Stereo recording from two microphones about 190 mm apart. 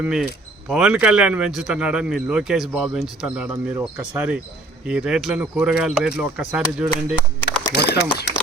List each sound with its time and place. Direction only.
0.0 s a man's voice: 5° right (ahead or behind)
7.8 s speech: 60° left (ahead or behind)